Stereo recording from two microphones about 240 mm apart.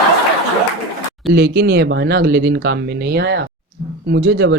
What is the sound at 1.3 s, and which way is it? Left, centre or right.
Speech, right.